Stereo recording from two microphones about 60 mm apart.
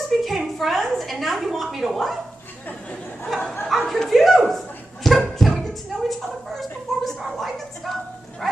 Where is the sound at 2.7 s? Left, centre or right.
Centre.